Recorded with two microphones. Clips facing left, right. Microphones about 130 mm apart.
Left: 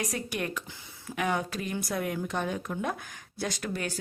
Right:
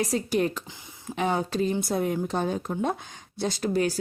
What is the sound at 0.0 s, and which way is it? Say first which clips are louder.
A woman's voice: right 8 dB; 30° right (ahead or behind).